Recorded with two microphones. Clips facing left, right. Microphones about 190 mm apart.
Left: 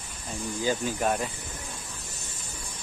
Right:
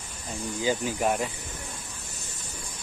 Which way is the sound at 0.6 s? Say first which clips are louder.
Right 1 dB; 15° right (ahead or behind).